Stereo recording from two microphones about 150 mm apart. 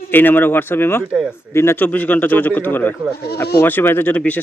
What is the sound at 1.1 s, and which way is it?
Speech, 5° right (ahead or behind).